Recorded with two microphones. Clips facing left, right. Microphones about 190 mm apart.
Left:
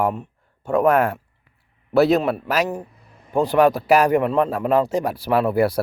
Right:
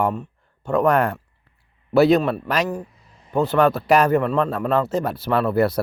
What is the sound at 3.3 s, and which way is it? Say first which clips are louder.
A man's voice: left 1 dB; 10° left (ahead or behind).